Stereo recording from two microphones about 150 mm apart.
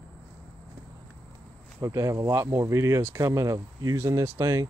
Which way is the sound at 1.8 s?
20° right (ahead or behind).